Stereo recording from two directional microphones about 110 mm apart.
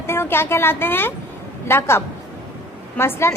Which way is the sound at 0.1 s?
20° left (ahead or behind).